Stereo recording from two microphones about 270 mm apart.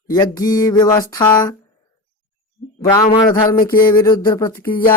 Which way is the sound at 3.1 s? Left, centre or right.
Centre.